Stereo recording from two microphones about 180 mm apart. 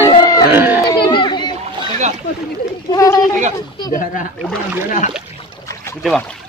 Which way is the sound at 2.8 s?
20° left (ahead or behind).